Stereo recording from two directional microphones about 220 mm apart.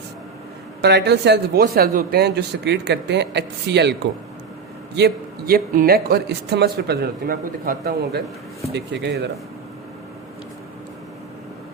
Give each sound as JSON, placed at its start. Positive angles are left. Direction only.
{"t": 0.8, "sound": "a man's voice", "side_deg": -50}
{"t": 4.9, "sound": "a man's voice", "side_deg": -45}